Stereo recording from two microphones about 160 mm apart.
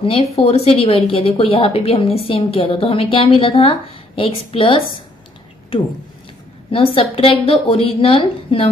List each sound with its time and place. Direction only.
0.0 s a woman's voice: 35° left (ahead or behind)